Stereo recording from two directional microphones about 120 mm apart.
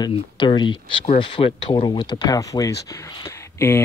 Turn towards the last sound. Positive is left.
turn(degrees=20)  # may be behind; listen again after turning